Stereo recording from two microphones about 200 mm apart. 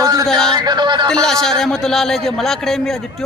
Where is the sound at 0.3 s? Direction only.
5° left (ahead or behind).